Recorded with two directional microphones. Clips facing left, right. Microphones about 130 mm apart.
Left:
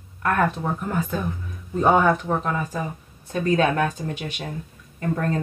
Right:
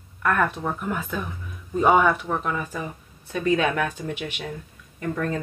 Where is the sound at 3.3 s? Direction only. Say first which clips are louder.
Left 2 dB; 40° left (ahead or behind).